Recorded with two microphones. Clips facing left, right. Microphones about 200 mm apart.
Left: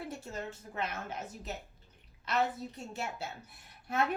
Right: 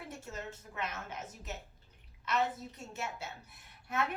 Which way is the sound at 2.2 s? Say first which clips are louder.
Left 1 dB; 30° left (ahead or behind).